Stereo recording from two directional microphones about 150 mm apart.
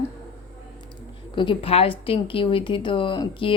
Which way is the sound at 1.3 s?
35° left (ahead or behind).